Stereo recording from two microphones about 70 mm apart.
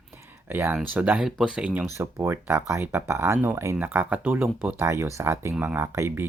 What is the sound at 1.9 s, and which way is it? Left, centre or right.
Speech, right.